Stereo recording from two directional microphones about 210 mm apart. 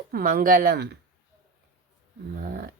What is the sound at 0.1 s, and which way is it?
Speech, 45° right (ahead or behind).